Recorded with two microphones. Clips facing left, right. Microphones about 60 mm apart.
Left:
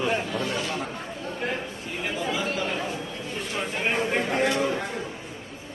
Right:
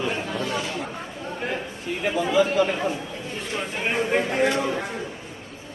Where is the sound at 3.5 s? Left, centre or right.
Centre.